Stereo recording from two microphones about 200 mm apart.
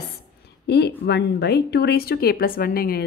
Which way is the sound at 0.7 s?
55° left (ahead or behind).